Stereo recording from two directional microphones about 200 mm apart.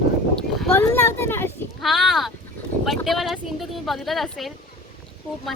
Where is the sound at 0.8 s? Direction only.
10° left (ahead or behind).